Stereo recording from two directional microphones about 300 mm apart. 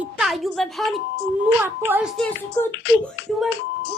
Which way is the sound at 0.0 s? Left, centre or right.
Centre.